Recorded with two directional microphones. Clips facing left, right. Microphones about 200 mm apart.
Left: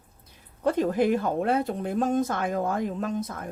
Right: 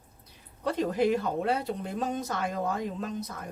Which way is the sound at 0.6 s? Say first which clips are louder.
Left 3 dB; 50° left (ahead or behind).